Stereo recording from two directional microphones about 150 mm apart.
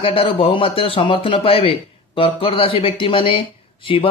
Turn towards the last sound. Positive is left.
turn(degrees=35)  # may be behind; listen again after turning